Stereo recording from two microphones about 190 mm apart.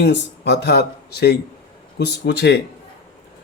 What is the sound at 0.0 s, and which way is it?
Speech, 60° left (ahead or behind).